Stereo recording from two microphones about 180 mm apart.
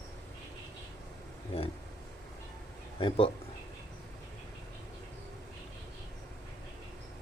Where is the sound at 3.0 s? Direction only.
30° left (ahead or behind).